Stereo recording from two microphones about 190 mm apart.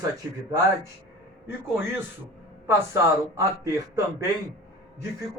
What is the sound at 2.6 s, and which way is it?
A man's voice, 15° right (ahead or behind).